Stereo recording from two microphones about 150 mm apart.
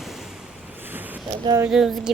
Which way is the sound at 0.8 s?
10° right (ahead or behind).